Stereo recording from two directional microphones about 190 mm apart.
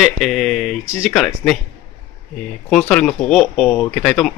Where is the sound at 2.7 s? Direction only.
5° left (ahead or behind).